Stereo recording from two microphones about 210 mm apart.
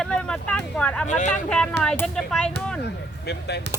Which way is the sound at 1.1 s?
35° left (ahead or behind).